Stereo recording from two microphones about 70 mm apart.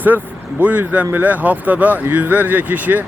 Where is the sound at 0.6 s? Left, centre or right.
Right.